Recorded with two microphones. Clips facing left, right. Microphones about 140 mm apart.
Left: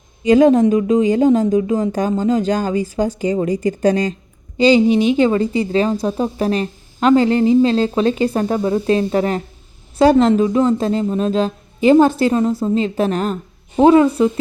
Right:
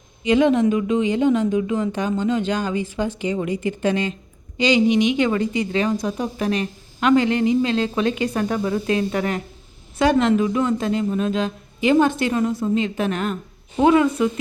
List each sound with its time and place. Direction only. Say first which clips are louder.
0.3 s a woman's voice: left 5 dB; 40° left (ahead or behind)